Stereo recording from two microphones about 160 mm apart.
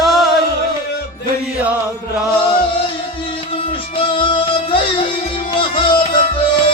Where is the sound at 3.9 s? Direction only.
30° left (ahead or behind).